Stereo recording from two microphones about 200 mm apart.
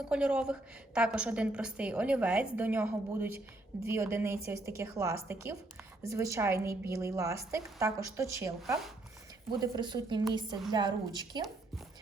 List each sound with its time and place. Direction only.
0.1 s a woman's voice: 5° right (ahead or behind); by 11.4 s 20° right (ahead or behind)